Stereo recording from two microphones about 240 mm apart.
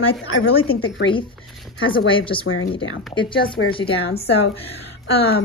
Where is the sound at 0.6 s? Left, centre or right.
Left.